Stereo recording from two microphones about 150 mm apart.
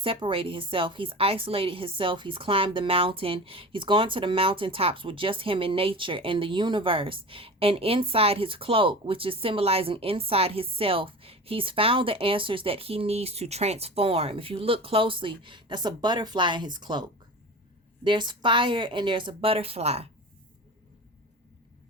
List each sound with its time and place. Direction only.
0.0 s a woman's voice: 35° right (ahead or behind)